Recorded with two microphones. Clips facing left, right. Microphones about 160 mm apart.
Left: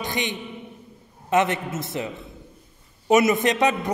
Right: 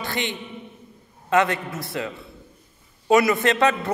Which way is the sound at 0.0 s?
15° left (ahead or behind).